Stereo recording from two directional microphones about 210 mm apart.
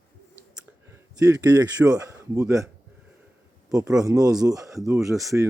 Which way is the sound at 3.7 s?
15° right (ahead or behind).